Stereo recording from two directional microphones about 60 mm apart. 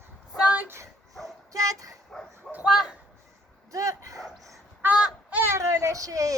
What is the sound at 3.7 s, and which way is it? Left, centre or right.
Dog, right.